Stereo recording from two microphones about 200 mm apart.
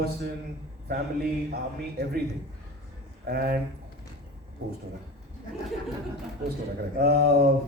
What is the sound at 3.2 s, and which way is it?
Speech, 50° right (ahead or behind).